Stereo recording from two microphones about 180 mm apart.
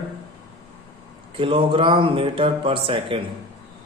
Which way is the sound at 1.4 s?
30° right (ahead or behind).